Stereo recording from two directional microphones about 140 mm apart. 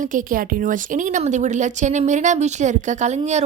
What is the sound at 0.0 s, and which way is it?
Speech, 70° right (ahead or behind).